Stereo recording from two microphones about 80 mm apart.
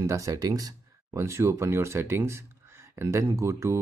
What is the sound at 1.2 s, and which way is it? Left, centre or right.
Speech, right.